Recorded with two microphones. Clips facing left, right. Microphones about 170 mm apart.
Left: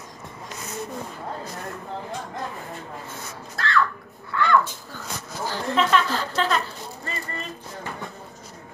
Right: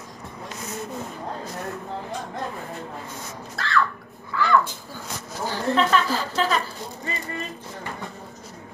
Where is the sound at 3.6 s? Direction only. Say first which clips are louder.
Left 3 dB; centre (ahead or behind).